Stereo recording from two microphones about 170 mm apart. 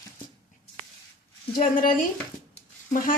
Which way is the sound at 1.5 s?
55° left (ahead or behind).